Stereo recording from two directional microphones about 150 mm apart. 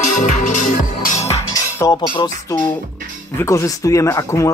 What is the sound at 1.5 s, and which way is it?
Cutlery, 25° left (ahead or behind).